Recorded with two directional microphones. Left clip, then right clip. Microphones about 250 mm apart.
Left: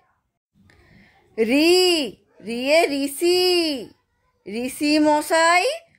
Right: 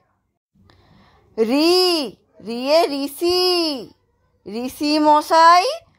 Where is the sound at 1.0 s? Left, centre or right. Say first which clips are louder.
Right 2 dB; centre.